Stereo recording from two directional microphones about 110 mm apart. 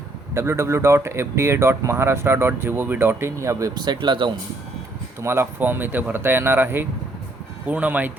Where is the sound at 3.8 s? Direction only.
40° right (ahead or behind).